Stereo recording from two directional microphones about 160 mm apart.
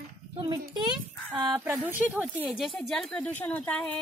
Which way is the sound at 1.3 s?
25° right (ahead or behind).